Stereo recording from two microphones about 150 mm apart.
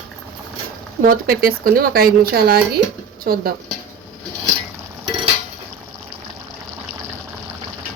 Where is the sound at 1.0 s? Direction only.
75° right (ahead or behind).